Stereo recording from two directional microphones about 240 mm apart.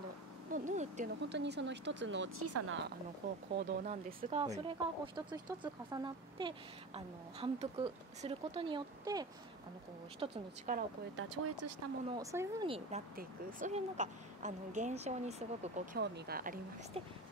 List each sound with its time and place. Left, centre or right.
0.5 s speech: right
1.2 s speech: right
3.2 s speech: right; by 10.4 s centre
10.7 s speech: right
11.1 s speech: right
12.2 s speech: centre
13.1 s speech: right
16.0 s speech: right